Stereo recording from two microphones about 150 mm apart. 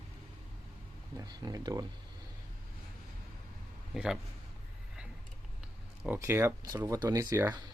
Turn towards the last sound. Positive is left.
turn(degrees=-20)  # may be behind; listen again after turning